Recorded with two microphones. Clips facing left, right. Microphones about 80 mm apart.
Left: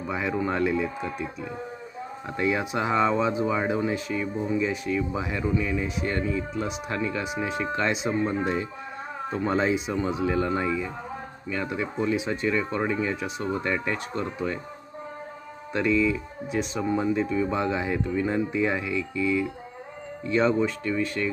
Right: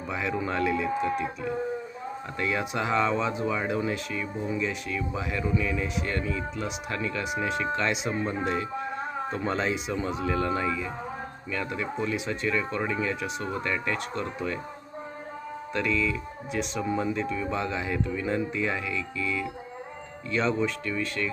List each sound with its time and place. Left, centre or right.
0.1 s speech: centre
15.7 s speech: centre
16.5 s speech: centre